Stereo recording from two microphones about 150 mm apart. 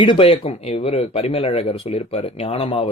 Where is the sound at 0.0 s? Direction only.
35° left (ahead or behind).